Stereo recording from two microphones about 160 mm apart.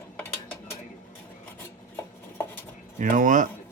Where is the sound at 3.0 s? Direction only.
55° right (ahead or behind).